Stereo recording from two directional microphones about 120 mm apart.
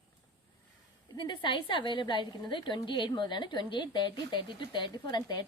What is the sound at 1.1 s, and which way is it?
A woman's voice, 40° left (ahead or behind).